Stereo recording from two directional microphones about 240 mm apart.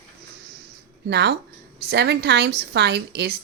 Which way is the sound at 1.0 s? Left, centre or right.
Right.